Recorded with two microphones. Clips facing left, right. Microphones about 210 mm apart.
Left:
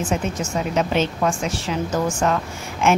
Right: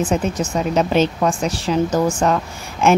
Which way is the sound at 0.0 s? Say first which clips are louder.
Right 4 dB; 35° right (ahead or behind).